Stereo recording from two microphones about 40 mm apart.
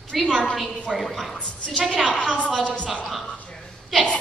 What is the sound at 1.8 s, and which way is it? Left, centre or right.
Speech, centre.